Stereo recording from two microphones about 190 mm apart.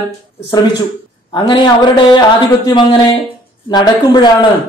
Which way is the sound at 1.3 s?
25° left (ahead or behind).